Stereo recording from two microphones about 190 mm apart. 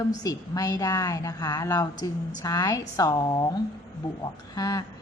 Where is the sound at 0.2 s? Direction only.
20° left (ahead or behind).